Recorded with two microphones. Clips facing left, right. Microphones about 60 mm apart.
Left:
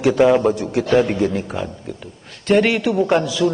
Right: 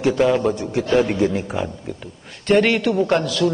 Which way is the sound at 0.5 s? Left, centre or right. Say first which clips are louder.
Left 2 dB; centre.